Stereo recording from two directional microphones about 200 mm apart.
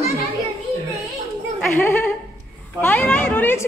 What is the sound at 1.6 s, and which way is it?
A woman's voice, 10° left (ahead or behind).